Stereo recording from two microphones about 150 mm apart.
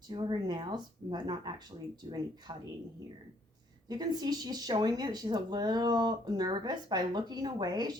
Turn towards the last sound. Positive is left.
turn(degrees=-25)  # may be behind; listen again after turning